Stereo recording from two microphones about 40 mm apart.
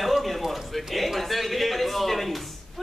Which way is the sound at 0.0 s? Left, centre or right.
Centre.